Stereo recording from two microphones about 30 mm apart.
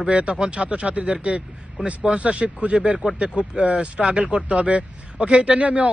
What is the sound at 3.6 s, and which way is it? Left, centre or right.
Speech, right.